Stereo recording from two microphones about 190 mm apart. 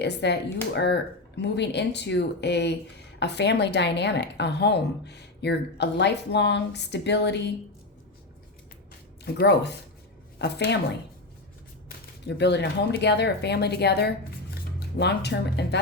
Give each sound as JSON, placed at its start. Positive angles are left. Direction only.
{"t": 0.0, "sound": "speech", "side_deg": 60}
{"t": 9.2, "sound": "a woman's voice", "side_deg": 60}
{"t": 11.9, "sound": "speech", "side_deg": 60}